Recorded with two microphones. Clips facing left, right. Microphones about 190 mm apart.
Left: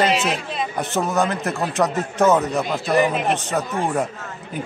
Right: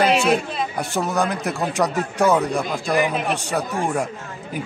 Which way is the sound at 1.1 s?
15° right (ahead or behind).